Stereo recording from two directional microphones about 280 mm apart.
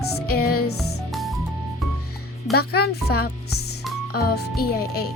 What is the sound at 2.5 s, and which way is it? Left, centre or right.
Speech, left.